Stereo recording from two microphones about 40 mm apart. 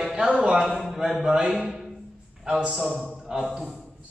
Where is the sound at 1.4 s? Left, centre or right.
Centre.